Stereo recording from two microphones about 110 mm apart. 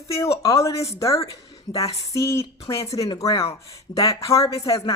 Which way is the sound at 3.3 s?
60° left (ahead or behind).